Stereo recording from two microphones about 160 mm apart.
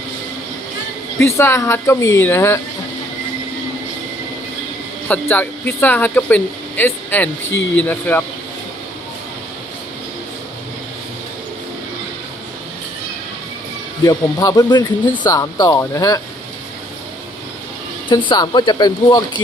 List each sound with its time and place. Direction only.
1.4 s speech: 15° left (ahead or behind)
5.0 s speech: 10° left (ahead or behind)
14.0 s speech: 20° left (ahead or behind)
18.1 s speech: 25° left (ahead or behind)